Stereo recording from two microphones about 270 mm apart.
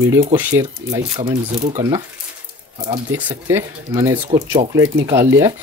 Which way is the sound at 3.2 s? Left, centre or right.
Centre.